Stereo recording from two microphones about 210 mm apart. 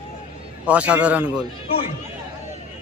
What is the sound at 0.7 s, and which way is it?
Speech, 5° right (ahead or behind).